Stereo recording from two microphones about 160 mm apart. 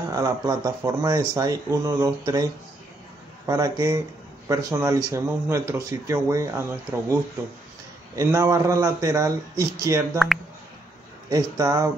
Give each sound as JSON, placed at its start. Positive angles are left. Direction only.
{"t": 0.1, "sound": "speech", "side_deg": -20}
{"t": 3.4, "sound": "speech", "side_deg": -20}
{"t": 8.2, "sound": "speech", "side_deg": -20}
{"t": 10.1, "sound": "speech", "side_deg": 0}
{"t": 11.2, "sound": "speech", "side_deg": -20}